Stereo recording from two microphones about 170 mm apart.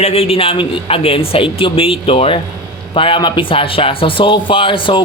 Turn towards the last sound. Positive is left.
turn(degrees=30)  # may be behind; listen again after turning